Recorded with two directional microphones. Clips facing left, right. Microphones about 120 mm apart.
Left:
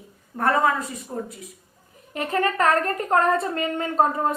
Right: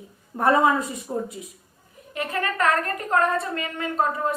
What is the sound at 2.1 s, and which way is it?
A woman's voice, 35° left (ahead or behind).